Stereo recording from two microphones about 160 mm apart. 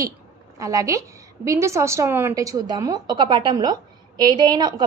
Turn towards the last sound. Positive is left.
turn(degrees=-25)  # may be behind; listen again after turning